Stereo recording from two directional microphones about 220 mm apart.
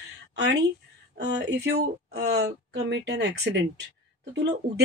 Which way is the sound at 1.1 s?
50° right (ahead or behind).